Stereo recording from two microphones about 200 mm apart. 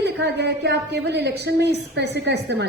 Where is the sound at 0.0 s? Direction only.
60° right (ahead or behind).